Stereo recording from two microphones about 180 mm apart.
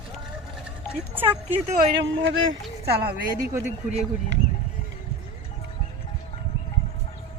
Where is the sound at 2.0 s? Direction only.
90° right.